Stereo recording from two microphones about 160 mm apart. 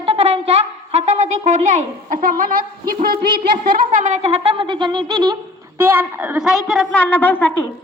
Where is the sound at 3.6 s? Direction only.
55° right (ahead or behind); by 5.4 s 25° right (ahead or behind).